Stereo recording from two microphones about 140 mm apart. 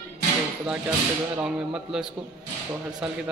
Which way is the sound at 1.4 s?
5° right (ahead or behind).